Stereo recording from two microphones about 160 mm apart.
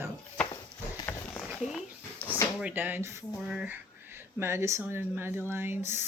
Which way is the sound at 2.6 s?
10° right (ahead or behind).